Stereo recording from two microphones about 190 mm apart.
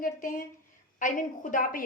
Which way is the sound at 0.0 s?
45° left (ahead or behind).